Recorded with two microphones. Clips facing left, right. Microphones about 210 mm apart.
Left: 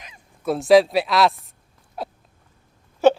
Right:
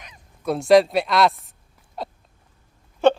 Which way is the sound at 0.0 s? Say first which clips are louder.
Left 1 dB; 5° left (ahead or behind).